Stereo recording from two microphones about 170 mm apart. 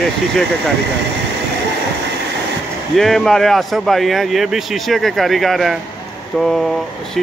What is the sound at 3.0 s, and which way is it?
Speech, centre (ahead or behind).